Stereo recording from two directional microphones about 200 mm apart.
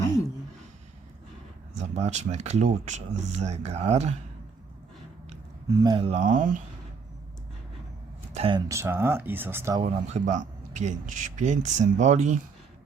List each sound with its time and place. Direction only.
1.8 s speech: 35° right (ahead or behind)
5.6 s speech: 20° right (ahead or behind)
6.1 s speech: 40° right (ahead or behind)
8.3 s speech: 30° right (ahead or behind); by 9.8 s 15° right (ahead or behind)
9.8 s speech: 35° right (ahead or behind)